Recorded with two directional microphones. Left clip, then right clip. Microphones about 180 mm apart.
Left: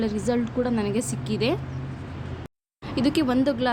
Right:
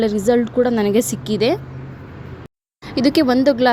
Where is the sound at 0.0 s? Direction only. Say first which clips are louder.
Right 10 dB; 35° right (ahead or behind).